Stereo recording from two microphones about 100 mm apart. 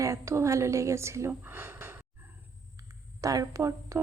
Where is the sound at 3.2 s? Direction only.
35° right (ahead or behind).